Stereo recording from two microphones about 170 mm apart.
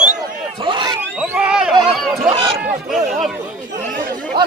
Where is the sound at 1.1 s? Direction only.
5° right (ahead or behind).